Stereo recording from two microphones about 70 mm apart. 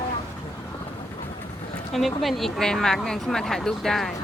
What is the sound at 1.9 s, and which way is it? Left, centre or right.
Speech, centre.